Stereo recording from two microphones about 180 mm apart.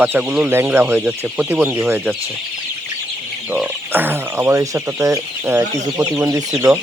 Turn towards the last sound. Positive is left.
turn(degrees=-15)  # may be behind; listen again after turning